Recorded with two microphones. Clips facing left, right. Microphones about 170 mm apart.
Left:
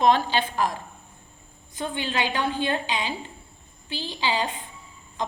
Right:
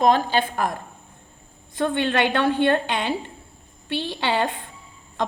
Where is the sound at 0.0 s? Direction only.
45° right (ahead or behind).